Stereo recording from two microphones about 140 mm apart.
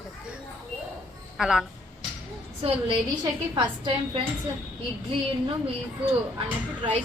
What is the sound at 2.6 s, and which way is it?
Speech, 45° right (ahead or behind).